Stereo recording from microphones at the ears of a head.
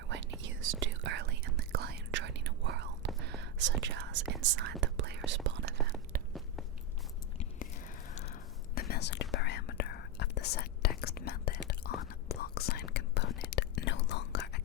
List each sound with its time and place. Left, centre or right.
0.1 s whispering: right
8.1 s whispering: left